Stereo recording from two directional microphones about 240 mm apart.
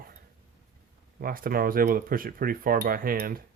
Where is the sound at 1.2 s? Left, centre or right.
Right.